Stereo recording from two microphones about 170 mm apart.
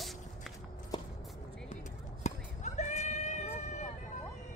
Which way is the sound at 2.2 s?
45° left (ahead or behind).